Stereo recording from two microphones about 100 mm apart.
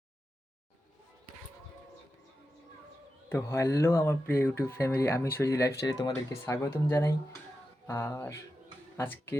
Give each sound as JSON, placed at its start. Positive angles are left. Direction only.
{"t": 3.2, "sound": "speech", "side_deg": 25}
{"t": 5.8, "sound": "speech", "side_deg": 45}
{"t": 6.4, "sound": "speech", "side_deg": 20}